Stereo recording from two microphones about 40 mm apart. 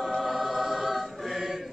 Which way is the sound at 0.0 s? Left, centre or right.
Centre.